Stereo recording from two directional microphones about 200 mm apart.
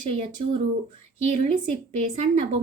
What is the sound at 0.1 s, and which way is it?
Speech, 25° right (ahead or behind).